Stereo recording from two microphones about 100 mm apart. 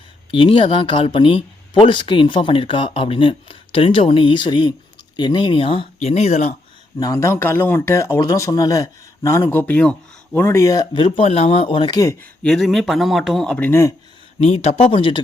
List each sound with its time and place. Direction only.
0.3 s speech: 60° left (ahead or behind); by 6.5 s 90° left
7.0 s speech: 30° left (ahead or behind)
10.9 s speech: 60° left (ahead or behind)
12.4 s speech: 5° left (ahead or behind)
14.3 s speech: 90° left; by 15.2 s 60° left (ahead or behind)